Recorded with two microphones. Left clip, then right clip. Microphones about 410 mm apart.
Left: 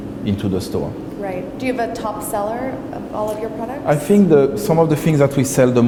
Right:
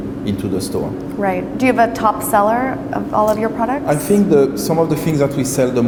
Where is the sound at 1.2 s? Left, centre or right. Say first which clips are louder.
Right 7 dB; right.